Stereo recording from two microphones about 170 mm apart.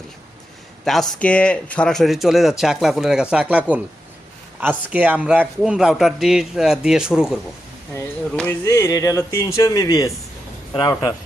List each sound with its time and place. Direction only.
0.9 s speech: 5° left (ahead or behind)
4.9 s speech: 10° right (ahead or behind)
8.4 s speech: 15° left (ahead or behind)